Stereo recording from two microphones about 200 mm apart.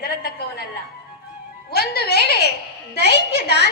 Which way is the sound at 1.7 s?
50° left (ahead or behind).